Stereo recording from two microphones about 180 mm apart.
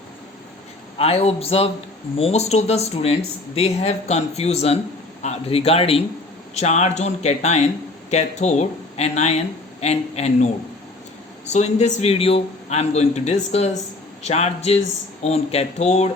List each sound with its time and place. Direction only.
0.9 s a man's voice: 35° left (ahead or behind)